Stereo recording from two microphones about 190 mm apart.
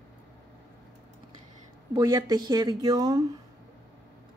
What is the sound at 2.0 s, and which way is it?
Speech, 20° right (ahead or behind).